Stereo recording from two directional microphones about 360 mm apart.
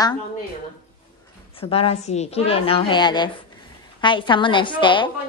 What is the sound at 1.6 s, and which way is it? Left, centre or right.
A woman's voice, centre.